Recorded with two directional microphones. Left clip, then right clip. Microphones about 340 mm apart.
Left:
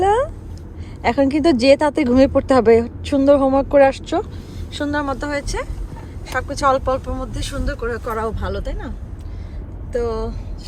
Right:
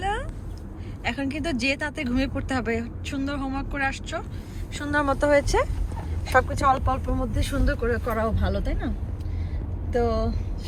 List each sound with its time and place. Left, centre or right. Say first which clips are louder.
1.1 s speech: left 15 dB; centre
9.9 s speech: left 2 dB; centre